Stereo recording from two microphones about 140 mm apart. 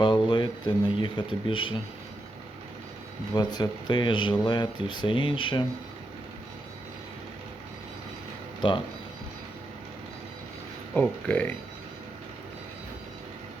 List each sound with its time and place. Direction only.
0.0 s a sound: 35° left (ahead or behind)
1.0 s speech: 35° left (ahead or behind)
3.3 s speech: 30° left (ahead or behind)
8.6 s speech: 35° left (ahead or behind)
10.9 s speech: 10° left (ahead or behind)